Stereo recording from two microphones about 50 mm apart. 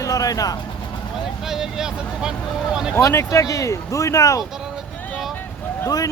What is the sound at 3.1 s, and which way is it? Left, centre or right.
Speech, left.